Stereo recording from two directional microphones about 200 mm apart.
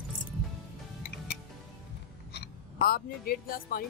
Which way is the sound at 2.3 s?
50° left (ahead or behind).